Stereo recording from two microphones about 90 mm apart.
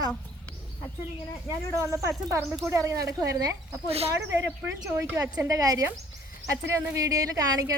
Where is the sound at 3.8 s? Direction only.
90° right.